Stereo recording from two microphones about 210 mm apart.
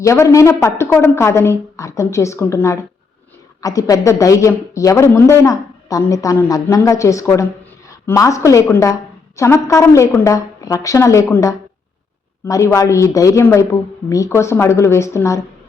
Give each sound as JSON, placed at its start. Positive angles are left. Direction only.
{"t": 0.0, "sound": "a woman's voice", "side_deg": 15}